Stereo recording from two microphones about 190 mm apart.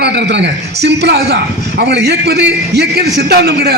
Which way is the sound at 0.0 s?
65° right (ahead or behind).